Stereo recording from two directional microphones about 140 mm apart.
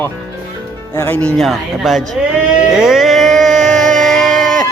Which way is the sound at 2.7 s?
Centre (ahead or behind).